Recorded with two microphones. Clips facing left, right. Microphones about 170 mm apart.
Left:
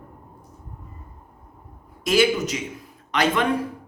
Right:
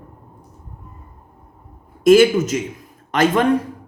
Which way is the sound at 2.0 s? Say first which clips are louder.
Right 8 dB; 50° right (ahead or behind).